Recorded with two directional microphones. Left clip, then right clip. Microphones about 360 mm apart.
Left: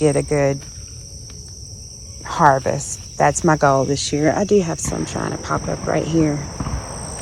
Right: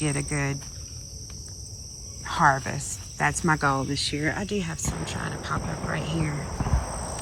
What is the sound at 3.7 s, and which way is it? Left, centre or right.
Speech, left.